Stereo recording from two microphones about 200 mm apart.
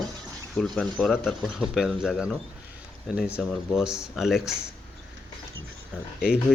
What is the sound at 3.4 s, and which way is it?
Speech, 5° right (ahead or behind).